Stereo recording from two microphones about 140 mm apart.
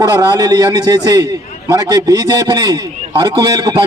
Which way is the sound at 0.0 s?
25° right (ahead or behind).